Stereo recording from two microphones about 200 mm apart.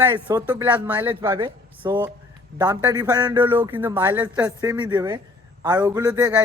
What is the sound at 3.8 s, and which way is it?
Speech, 10° right (ahead or behind).